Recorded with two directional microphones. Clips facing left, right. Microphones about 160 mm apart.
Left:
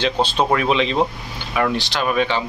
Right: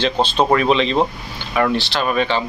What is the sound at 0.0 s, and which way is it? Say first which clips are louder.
Speech: right 2 dB; 10° left (ahead or behind).